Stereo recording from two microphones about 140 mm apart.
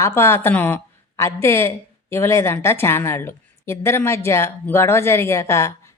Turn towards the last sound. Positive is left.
turn(degrees=20)  # may be behind; listen again after turning